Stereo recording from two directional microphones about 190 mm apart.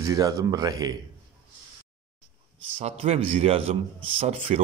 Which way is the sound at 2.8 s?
35° right (ahead or behind).